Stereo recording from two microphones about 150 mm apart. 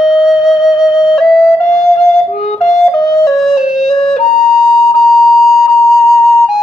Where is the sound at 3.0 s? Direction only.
25° left (ahead or behind).